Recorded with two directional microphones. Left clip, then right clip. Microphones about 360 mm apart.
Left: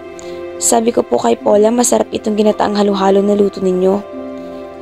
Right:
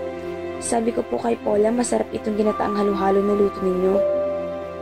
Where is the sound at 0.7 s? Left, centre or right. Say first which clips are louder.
Left 10 dB; centre.